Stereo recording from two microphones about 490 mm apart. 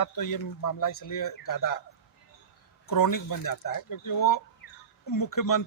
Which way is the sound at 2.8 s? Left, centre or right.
Left.